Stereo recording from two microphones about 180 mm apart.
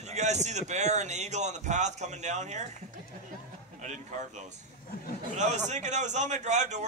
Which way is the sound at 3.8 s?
40° right (ahead or behind).